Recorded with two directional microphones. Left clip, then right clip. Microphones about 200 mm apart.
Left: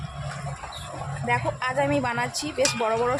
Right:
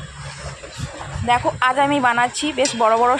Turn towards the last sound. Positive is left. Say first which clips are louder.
# right 8 dB
turn(degrees=-15)  # may be behind; listen again after turning